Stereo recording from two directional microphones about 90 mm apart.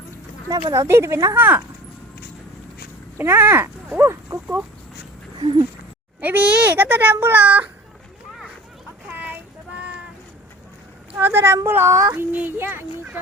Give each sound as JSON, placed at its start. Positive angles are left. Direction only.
{"t": 0.4, "sound": "speech", "side_deg": -40}
{"t": 1.4, "sound": "speech", "side_deg": -20}
{"t": 3.2, "sound": "speech", "side_deg": -25}
{"t": 3.8, "sound": "livestock", "side_deg": -20}
{"t": 5.4, "sound": "speech", "side_deg": -65}
{"t": 6.1, "sound": "speech", "side_deg": -20}
{"t": 9.0, "sound": "a sound", "side_deg": -20}
{"t": 11.2, "sound": "speech", "side_deg": -25}
{"t": 12.3, "sound": "speech", "side_deg": -20}